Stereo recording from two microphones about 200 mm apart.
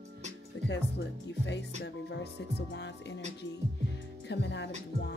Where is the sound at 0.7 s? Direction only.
60° left (ahead or behind).